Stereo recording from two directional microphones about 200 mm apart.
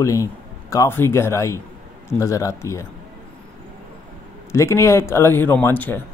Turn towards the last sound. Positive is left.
turn(degrees=10)  # may be behind; listen again after turning